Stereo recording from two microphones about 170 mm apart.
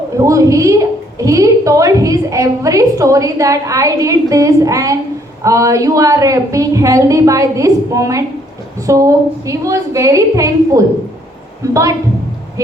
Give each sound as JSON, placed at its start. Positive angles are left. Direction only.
{"t": 0.2, "sound": "a woman's voice", "side_deg": -20}